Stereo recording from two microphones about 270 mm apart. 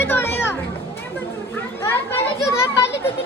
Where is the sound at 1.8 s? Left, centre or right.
Centre.